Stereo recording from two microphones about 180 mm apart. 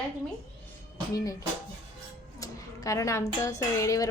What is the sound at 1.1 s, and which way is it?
Speech, 20° left (ahead or behind).